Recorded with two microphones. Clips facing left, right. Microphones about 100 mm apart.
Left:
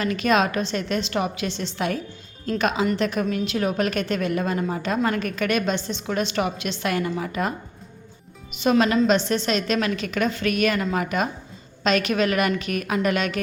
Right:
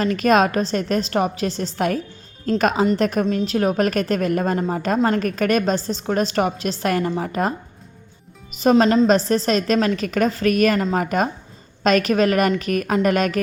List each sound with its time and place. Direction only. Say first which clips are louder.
0.0 s a woman's voice: right 4 dB; 40° right (ahead or behind)
8.7 s a woman's voice: right 4 dB; 30° right (ahead or behind)